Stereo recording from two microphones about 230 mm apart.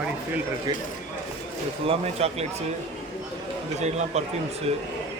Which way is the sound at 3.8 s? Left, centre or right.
Right.